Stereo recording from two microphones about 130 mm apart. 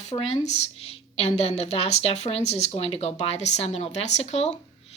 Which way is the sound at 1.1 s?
55° left (ahead or behind).